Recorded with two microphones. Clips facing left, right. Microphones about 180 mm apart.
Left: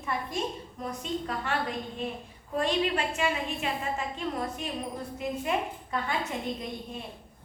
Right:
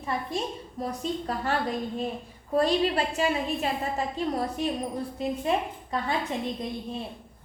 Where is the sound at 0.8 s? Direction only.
35° right (ahead or behind).